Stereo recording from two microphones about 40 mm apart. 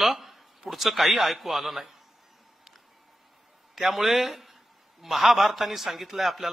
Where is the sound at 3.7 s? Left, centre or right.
Centre.